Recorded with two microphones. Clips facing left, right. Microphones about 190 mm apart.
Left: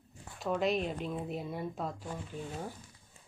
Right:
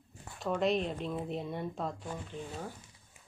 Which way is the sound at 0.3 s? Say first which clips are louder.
Right 1 dB; centre (ahead or behind).